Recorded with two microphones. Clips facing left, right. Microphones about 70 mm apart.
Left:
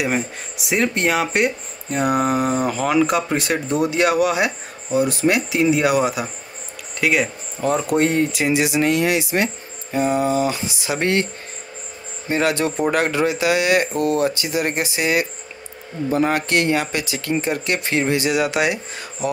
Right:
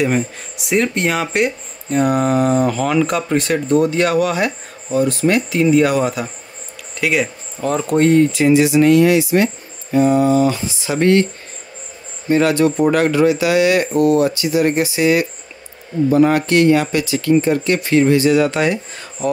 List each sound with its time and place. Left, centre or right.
0.0 s speech: centre
12.3 s speech: left
13.9 s speech: right
14.2 s speech: left; by 19.3 s centre